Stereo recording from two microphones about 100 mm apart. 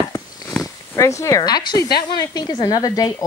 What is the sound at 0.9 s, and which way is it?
Speech, 30° left (ahead or behind).